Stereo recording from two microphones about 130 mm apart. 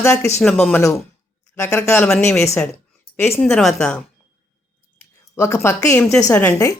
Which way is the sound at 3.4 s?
5° left (ahead or behind).